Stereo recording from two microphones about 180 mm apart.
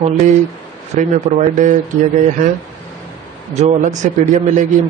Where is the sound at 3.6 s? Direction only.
40° right (ahead or behind).